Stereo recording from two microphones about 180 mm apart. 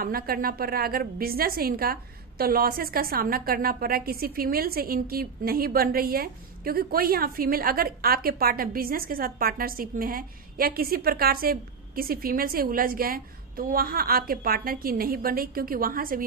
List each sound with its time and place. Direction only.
0.0 s a woman's voice: 55° right (ahead or behind)